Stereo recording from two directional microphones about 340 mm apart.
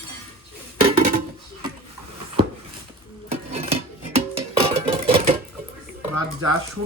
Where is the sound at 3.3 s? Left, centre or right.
Centre.